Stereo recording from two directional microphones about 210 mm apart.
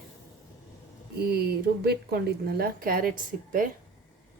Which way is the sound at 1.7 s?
50° right (ahead or behind).